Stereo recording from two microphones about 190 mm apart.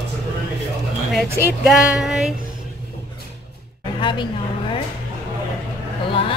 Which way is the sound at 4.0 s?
25° left (ahead or behind).